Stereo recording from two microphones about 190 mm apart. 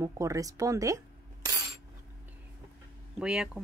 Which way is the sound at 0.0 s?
15° right (ahead or behind).